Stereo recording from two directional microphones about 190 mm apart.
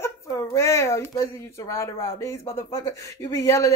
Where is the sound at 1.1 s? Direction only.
15° left (ahead or behind).